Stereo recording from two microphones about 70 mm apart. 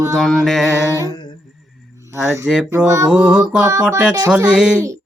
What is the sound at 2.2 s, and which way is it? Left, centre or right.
Mantra, right.